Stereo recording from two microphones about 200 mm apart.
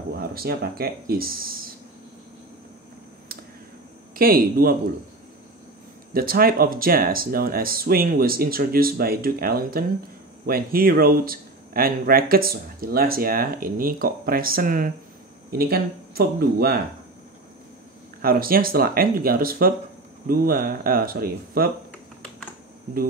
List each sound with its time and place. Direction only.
0.2 s speech: 50° right (ahead or behind)
4.2 s speech: 45° right (ahead or behind)
6.1 s speech: 50° right (ahead or behind)
18.2 s speech: 45° right (ahead or behind)